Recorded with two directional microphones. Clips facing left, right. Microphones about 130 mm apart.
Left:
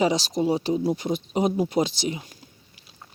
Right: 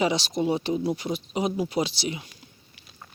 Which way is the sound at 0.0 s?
40° left (ahead or behind).